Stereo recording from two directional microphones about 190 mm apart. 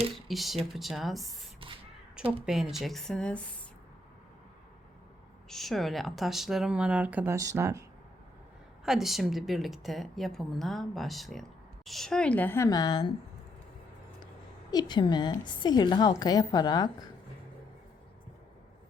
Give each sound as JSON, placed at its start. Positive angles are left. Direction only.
{"t": 0.3, "sound": "speech", "side_deg": 0}
{"t": 2.5, "sound": "speech", "side_deg": 0}
{"t": 5.5, "sound": "speech", "side_deg": 0}
{"t": 8.8, "sound": "a woman's voice", "side_deg": 0}
{"t": 14.7, "sound": "a woman's voice", "side_deg": 20}